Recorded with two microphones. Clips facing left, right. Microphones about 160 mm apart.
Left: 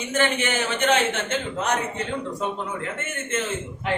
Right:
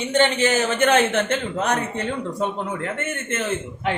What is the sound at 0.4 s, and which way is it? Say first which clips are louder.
Speech: right 5 dB; 40° right (ahead or behind).